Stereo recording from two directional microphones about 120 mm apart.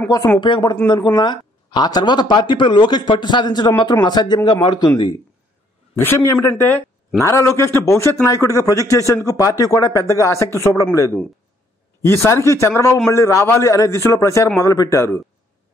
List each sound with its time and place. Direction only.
0.4 s speech: 40° left (ahead or behind)
5.9 s speech: 20° left (ahead or behind)
12.0 s speech: 20° left (ahead or behind)